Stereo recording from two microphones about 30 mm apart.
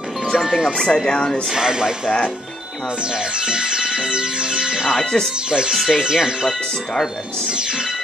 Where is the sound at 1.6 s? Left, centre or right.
Right.